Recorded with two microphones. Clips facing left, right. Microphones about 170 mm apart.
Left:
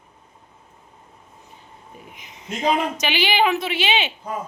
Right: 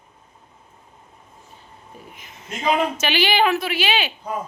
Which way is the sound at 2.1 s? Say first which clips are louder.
Left 3 dB; 20° left (ahead or behind).